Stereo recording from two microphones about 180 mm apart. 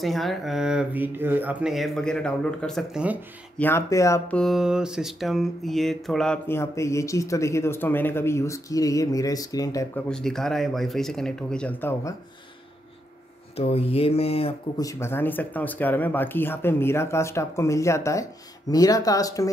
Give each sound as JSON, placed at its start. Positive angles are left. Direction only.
{"t": 0.0, "sound": "speech", "side_deg": 0}
{"t": 3.5, "sound": "speech", "side_deg": 10}
{"t": 4.4, "sound": "speech", "side_deg": 0}
{"t": 10.0, "sound": "speech", "side_deg": 5}
{"t": 13.6, "sound": "a sound", "side_deg": 35}
{"t": 14.8, "sound": "speech", "side_deg": 15}